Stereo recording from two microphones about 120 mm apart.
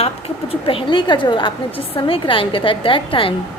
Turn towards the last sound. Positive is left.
turn(degrees=45)  # may be behind; listen again after turning